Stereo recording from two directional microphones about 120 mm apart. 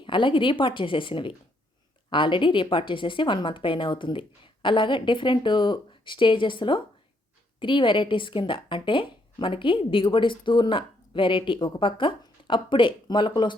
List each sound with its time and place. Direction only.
0.0 s speech: 45° left (ahead or behind)